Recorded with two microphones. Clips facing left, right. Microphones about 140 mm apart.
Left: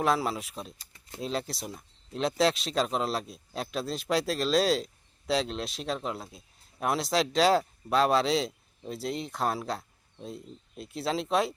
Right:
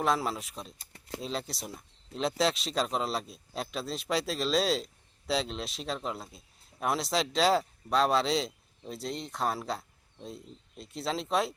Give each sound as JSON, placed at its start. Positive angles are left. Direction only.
{"t": 0.0, "sound": "speech", "side_deg": 0}
{"t": 0.9, "sound": "a sound", "side_deg": -75}
{"t": 1.2, "sound": "speech", "side_deg": 0}